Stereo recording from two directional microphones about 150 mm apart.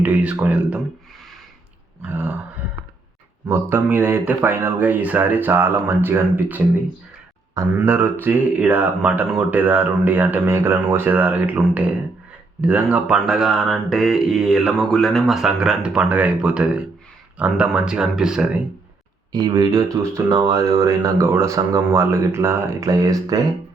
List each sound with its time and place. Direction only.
0.0 s speech: 10° right (ahead or behind)
2.0 s speech: 10° right (ahead or behind)
3.4 s speech: 15° right (ahead or behind)
7.8 s speech: 15° right (ahead or behind)
19.3 s speech: 30° right (ahead or behind)